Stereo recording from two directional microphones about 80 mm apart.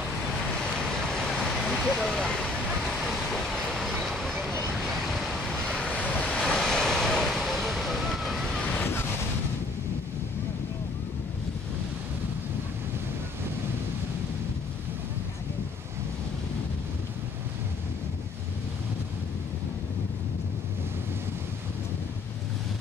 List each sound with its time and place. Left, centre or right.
0.8 s vehicle: centre
5.1 s waves: centre
8.7 s waves: left